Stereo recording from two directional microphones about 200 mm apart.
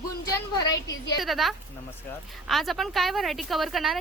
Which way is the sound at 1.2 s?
Centre (ahead or behind).